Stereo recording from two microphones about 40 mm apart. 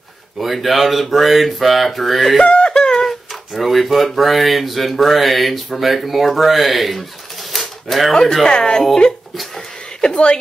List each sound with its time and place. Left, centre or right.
0.4 s speech: centre
2.4 s a sound: left
3.5 s speech: centre
7.5 s typewriter: centre
8.1 s speech: centre
9.9 s a sound: left